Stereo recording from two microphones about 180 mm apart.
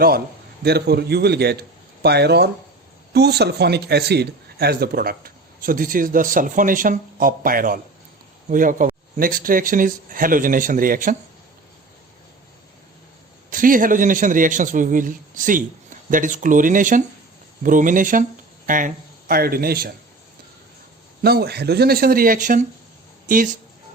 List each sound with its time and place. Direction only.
0.6 s a man's voice: 65° right (ahead or behind)
13.5 s a man's voice: 50° right (ahead or behind)
21.2 s a man's voice: 60° right (ahead or behind)